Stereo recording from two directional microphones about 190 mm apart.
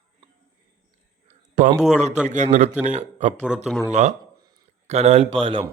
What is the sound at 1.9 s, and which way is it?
Speech, 35° right (ahead or behind).